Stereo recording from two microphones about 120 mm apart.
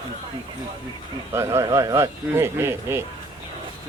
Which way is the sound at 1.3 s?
25° right (ahead or behind).